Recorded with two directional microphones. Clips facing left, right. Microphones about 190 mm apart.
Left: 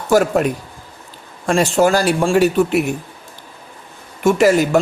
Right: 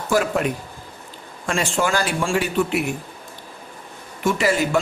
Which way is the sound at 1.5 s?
35° left (ahead or behind).